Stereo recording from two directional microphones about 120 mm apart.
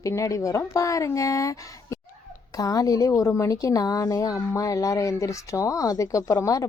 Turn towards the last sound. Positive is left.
turn(degrees=25)  # may be behind; listen again after turning